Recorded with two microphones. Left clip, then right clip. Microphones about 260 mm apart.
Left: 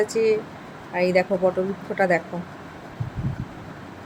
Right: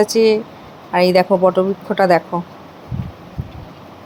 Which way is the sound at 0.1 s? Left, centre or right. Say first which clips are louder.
Right 7 dB; right.